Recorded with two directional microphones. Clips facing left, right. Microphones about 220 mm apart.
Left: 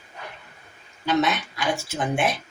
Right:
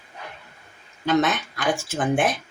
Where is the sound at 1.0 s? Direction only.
50° right (ahead or behind).